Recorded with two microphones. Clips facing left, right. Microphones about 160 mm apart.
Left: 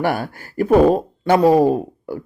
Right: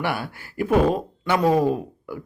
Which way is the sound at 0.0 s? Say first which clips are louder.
Left 6 dB; 45° left (ahead or behind).